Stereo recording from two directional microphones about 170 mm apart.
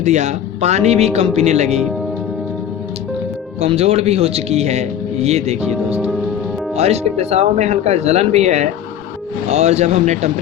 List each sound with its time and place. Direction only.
0.0 s speech: 45° right (ahead or behind)
3.6 s speech: 40° right (ahead or behind)
5.7 s speech: 5° right (ahead or behind)
6.7 s speech: 40° right (ahead or behind)